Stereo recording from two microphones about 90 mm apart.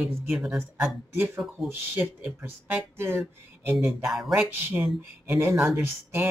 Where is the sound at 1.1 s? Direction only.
25° right (ahead or behind).